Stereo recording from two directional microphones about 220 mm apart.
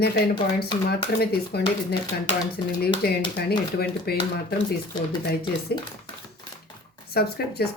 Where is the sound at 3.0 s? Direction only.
45° left (ahead or behind).